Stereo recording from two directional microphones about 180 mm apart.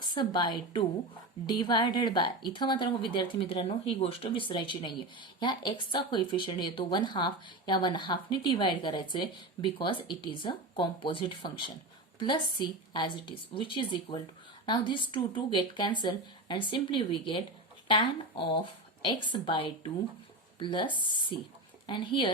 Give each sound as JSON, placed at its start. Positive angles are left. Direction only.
{"t": 0.0, "sound": "speech", "side_deg": 25}